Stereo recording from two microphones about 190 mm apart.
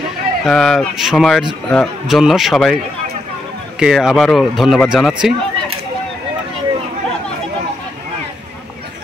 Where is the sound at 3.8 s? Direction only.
Centre (ahead or behind).